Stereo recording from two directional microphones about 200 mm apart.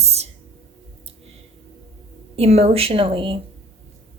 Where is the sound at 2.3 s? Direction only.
30° right (ahead or behind).